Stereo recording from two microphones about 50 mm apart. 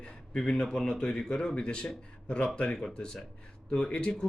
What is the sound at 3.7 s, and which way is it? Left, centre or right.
Speech, centre.